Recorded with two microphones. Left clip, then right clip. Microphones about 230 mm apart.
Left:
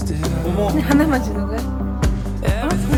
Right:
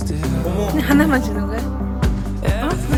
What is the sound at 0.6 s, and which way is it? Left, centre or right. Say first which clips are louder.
Speech: even; centre.